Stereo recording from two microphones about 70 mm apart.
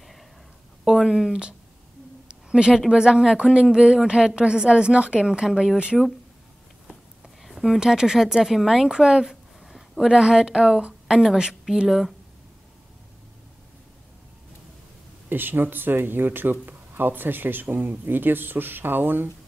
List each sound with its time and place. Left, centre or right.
0.8 s a woman's voice: centre
2.2 s a sound: centre
2.9 s a woman's voice: centre
7.4 s a woman's voice: centre
15.2 s speech: right